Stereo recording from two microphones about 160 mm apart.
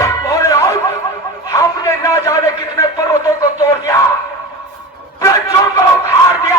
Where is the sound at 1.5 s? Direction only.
20° left (ahead or behind).